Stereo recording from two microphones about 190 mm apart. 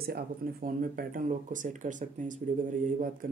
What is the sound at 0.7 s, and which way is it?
Speech, 45° right (ahead or behind).